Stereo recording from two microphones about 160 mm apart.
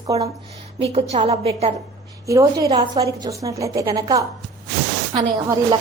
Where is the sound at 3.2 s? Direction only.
20° right (ahead or behind).